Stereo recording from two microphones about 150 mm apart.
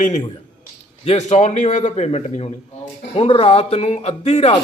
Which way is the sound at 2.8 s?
50° left (ahead or behind).